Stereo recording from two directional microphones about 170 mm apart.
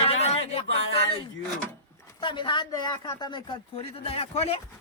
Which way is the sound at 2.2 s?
30° left (ahead or behind).